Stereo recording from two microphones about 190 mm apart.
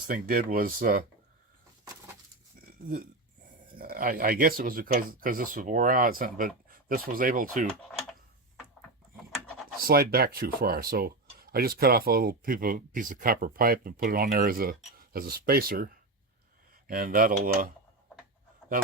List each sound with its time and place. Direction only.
0.1 s speech: 50° right (ahead or behind)
3.8 s speech: 50° right (ahead or behind)
9.8 s speech: 50° right (ahead or behind)